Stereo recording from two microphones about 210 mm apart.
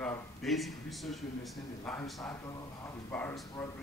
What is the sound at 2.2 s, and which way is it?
Speech, 15° left (ahead or behind).